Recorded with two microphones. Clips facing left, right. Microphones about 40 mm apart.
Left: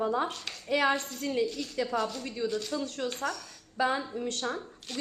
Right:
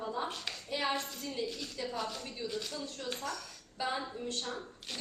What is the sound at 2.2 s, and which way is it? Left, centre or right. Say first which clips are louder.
A woman's voice: left 7 dB; left.